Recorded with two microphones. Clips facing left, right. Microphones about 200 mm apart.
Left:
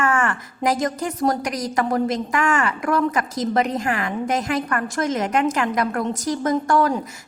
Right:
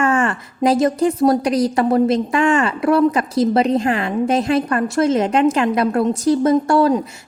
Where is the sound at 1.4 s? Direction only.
30° right (ahead or behind).